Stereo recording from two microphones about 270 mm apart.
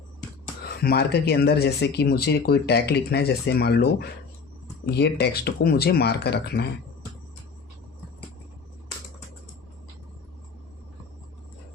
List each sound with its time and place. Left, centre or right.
0.6 s speech: left